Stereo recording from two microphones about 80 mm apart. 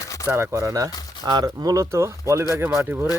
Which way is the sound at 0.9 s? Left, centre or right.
Left.